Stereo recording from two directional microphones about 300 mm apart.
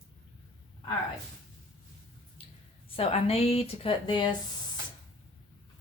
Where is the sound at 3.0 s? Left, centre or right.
Centre.